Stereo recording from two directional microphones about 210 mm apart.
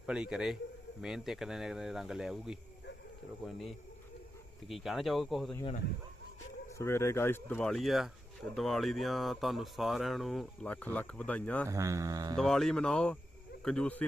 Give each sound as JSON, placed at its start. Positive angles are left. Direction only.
{"t": 0.0, "sound": "speech", "side_deg": -5}
{"t": 6.7, "sound": "speech", "side_deg": 10}
{"t": 11.7, "sound": "speech", "side_deg": -15}
{"t": 12.4, "sound": "speech", "side_deg": 0}